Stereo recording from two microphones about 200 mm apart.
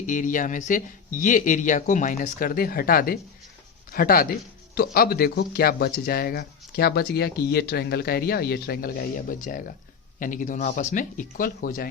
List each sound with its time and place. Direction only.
0.0 s speech: 40° left (ahead or behind)